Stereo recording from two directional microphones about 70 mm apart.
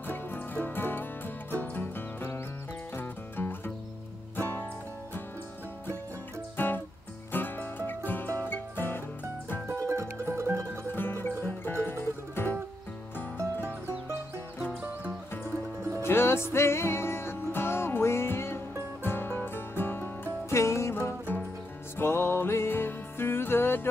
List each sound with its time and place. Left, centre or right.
0.0 s music: left
6.5 s music: left
9.7 s music: right
10.9 s music: left
13.4 s music: right
16.0 s music: left
20.5 s music: left
21.3 s music: left